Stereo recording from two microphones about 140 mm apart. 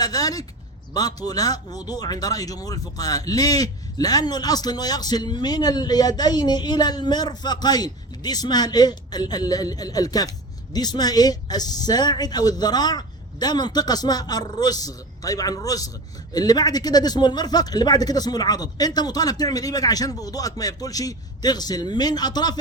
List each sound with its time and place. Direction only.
0.0 s a man's voice: 25° left (ahead or behind)